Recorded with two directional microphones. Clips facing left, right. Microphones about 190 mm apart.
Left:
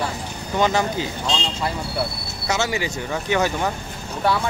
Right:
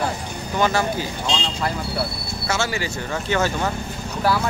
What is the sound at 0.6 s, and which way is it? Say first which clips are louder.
Speech: left 1 dB; 20° left (ahead or behind).